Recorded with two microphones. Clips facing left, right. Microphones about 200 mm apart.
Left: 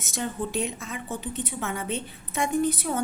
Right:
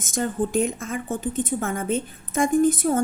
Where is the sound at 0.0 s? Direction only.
50° right (ahead or behind).